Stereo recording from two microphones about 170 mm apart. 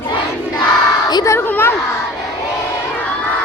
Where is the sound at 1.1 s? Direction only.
20° left (ahead or behind).